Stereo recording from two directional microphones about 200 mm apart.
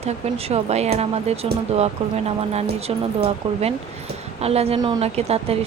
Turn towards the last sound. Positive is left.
turn(degrees=-30)  # may be behind; listen again after turning